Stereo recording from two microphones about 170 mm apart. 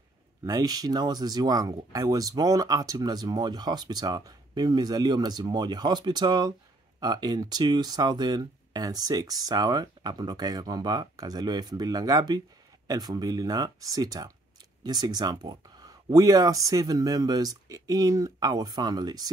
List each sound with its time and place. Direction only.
0.5 s speech: 20° right (ahead or behind)